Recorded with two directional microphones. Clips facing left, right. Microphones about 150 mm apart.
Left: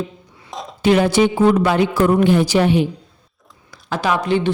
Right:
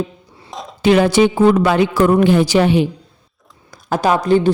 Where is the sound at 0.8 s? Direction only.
90° right.